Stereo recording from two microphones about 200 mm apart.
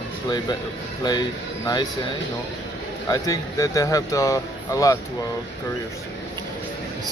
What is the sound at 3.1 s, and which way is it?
Speech, 15° left (ahead or behind).